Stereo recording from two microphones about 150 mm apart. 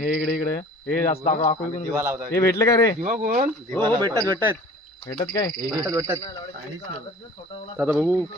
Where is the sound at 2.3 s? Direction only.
20° left (ahead or behind).